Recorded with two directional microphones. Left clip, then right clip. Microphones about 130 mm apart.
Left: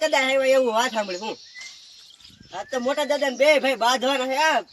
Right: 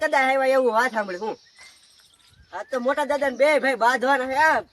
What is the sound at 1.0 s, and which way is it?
Speech, 10° left (ahead or behind).